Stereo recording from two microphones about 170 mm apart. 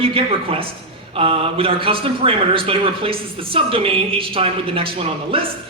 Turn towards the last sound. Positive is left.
turn(degrees=-30)  # may be behind; listen again after turning